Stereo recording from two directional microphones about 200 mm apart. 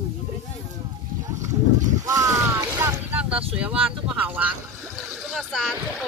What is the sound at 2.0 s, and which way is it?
Vehicle, 15° right (ahead or behind).